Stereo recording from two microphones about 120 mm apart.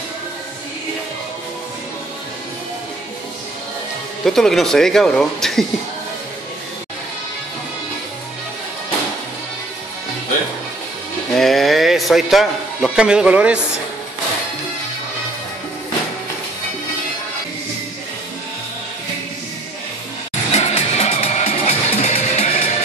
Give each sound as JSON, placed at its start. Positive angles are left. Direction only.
{"t": 4.2, "sound": "speech", "side_deg": 5}
{"t": 11.3, "sound": "a sound", "side_deg": 0}
{"t": 20.5, "sound": "music", "side_deg": 65}